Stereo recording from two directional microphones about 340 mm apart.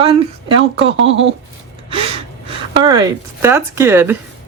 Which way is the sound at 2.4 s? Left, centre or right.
Centre.